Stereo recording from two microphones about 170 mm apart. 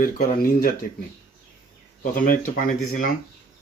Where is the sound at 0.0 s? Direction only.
60° left (ahead or behind).